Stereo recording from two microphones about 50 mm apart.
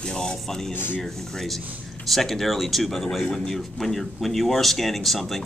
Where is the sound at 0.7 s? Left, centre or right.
Left.